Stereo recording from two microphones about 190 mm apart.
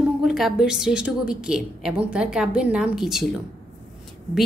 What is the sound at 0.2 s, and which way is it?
A woman's voice, centre (ahead or behind).